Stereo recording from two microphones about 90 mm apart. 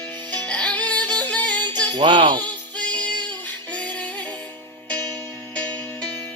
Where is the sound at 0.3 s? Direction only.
15° left (ahead or behind).